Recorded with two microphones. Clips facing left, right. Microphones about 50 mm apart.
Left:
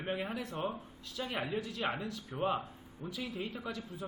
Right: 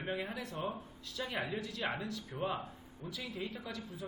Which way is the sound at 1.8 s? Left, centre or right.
Centre.